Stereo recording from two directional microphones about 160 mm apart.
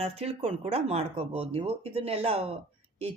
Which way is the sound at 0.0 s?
40° right (ahead or behind).